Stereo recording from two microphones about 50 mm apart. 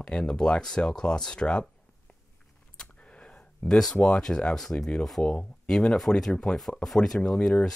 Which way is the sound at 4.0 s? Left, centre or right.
Centre.